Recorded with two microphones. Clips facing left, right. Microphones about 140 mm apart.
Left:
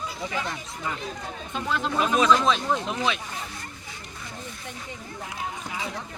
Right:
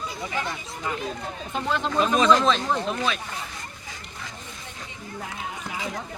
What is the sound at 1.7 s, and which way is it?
Speech, 5° left (ahead or behind).